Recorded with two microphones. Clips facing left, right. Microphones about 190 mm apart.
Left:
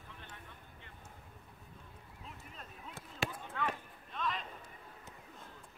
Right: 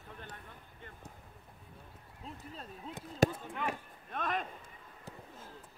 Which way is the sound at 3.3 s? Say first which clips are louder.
Right 1 dB; 15° right (ahead or behind).